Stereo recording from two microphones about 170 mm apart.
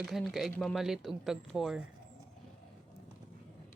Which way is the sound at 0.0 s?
Centre (ahead or behind).